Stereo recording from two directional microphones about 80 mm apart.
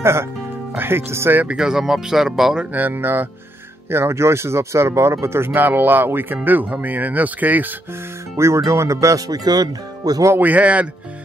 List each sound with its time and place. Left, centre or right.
0.0 s speech: right
1.4 s speech: centre
2.7 s speech: right
8.5 s speech: right
10.3 s speech: right